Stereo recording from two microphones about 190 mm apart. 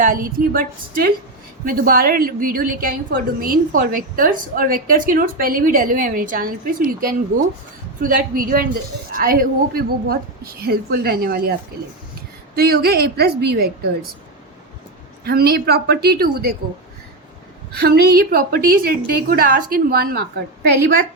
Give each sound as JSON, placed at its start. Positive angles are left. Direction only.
{"t": 0.0, "sound": "a woman's voice", "side_deg": -45}
{"t": 12.5, "sound": "a woman's voice", "side_deg": -55}
{"t": 15.2, "sound": "a woman's voice", "side_deg": -55}
{"t": 17.7, "sound": "a woman's voice", "side_deg": -55}